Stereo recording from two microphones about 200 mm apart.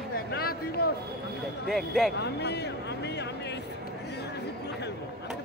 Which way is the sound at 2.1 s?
55° left (ahead or behind).